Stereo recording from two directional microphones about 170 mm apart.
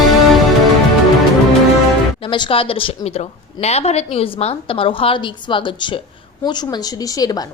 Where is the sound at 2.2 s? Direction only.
30° left (ahead or behind).